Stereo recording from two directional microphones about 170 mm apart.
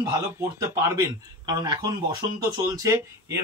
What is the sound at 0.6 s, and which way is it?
Speech, 15° right (ahead or behind).